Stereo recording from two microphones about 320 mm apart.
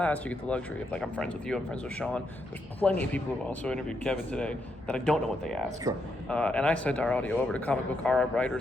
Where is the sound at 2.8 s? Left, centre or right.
Centre.